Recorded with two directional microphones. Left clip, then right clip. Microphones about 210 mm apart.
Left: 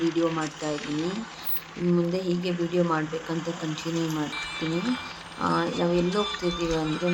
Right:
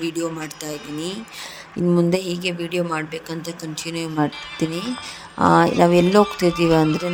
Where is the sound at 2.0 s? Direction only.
45° right (ahead or behind).